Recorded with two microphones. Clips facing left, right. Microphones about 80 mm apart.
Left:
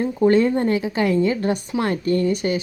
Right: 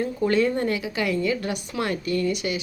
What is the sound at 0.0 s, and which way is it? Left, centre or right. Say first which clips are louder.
A woman's voice: left 5 dB; left.